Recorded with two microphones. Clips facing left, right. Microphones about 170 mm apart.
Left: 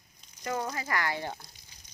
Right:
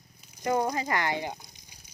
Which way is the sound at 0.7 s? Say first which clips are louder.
Right 4 dB; 20° right (ahead or behind).